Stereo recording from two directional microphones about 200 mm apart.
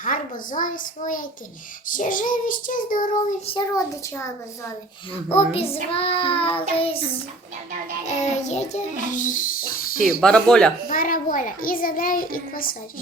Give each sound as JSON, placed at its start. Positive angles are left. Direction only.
{"t": 0.0, "sound": "a child's voice", "side_deg": 40}
{"t": 3.4, "sound": "child singing", "side_deg": 25}
{"t": 5.5, "sound": "child singing", "side_deg": 30}
{"t": 8.0, "sound": "a child's voice", "side_deg": 35}
{"t": 10.2, "sound": "speech", "side_deg": 5}
{"t": 10.8, "sound": "a child's voice", "side_deg": 45}